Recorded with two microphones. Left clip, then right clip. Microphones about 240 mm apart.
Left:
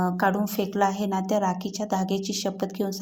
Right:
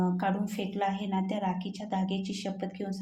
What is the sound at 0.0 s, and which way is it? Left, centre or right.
Speech, left.